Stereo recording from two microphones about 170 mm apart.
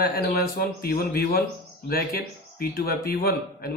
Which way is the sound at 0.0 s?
60° left (ahead or behind).